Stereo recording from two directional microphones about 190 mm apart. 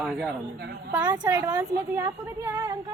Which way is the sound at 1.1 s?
20° right (ahead or behind).